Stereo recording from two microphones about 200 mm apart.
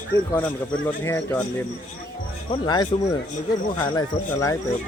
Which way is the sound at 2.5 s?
20° left (ahead or behind).